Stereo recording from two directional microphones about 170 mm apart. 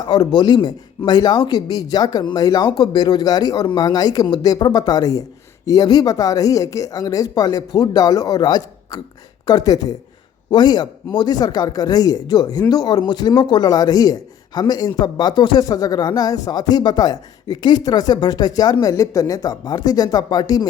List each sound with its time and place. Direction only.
0.0 s speech: 25° left (ahead or behind)